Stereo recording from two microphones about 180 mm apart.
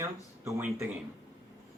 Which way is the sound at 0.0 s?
15° right (ahead or behind).